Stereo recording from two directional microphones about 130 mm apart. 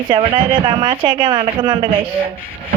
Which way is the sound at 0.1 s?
40° right (ahead or behind).